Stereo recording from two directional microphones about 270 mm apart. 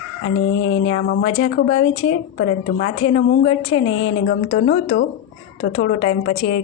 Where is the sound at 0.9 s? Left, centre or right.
Left.